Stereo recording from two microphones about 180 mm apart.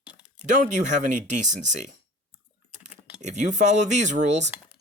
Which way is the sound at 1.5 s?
40° right (ahead or behind).